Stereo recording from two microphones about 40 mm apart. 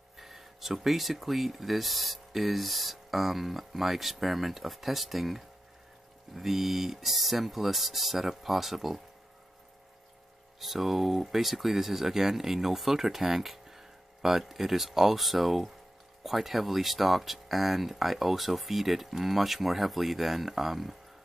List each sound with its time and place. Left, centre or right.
0.2 s speech: centre
10.6 s speech: centre